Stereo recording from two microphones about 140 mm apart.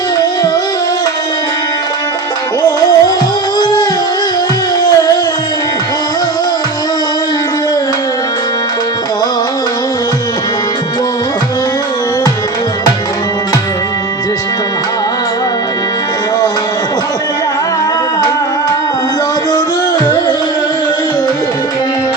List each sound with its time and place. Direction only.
2.6 s music: 30° left (ahead or behind)